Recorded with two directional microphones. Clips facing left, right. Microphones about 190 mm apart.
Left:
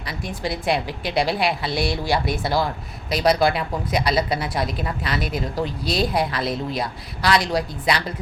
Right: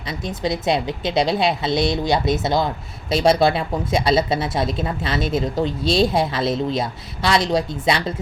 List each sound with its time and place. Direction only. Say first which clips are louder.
0.1 s a woman's voice: right 4 dB; 20° right (ahead or behind)